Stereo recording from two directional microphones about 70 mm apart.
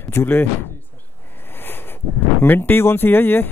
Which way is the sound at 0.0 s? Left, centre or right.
Left.